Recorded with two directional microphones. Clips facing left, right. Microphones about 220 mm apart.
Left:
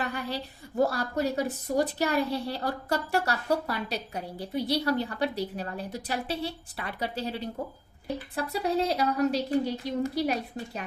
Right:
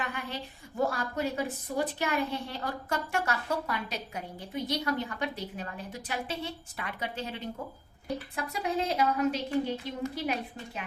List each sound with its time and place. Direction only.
0.0 s a woman's voice: 35° left (ahead or behind)